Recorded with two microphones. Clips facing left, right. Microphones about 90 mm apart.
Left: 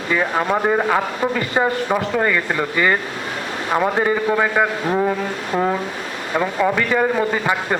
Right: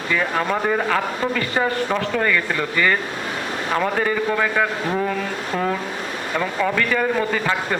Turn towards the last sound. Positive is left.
turn(degrees=15)  # may be behind; listen again after turning